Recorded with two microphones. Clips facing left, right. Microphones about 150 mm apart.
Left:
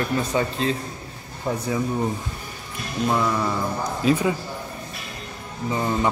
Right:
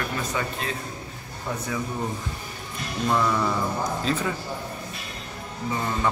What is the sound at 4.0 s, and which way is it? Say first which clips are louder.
Speech: left 11 dB; 15° left (ahead or behind).